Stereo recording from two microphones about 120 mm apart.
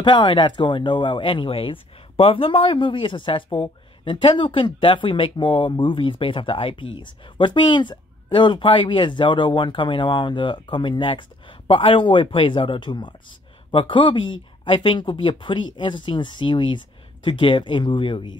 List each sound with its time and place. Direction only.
0.0 s speech: 40° left (ahead or behind)